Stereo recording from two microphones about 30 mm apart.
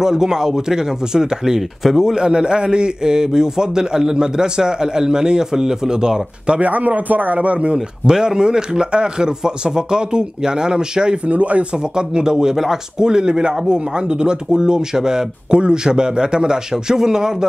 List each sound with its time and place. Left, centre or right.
0.0 s a man's voice: centre
6.6 s speech: right
7.3 s speech: right
7.7 s a man's voice: right
11.2 s speech: right
11.9 s a man's voice: right